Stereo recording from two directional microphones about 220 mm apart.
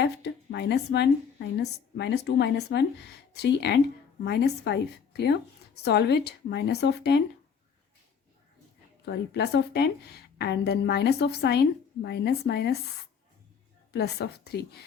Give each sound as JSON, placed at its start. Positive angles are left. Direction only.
{"t": 0.0, "sound": "a woman's voice", "side_deg": 50}
{"t": 9.0, "sound": "a woman's voice", "side_deg": 50}
{"t": 13.9, "sound": "a woman's voice", "side_deg": 45}